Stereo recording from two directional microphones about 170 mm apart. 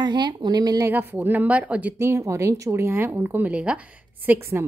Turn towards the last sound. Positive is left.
turn(degrees=-10)  # may be behind; listen again after turning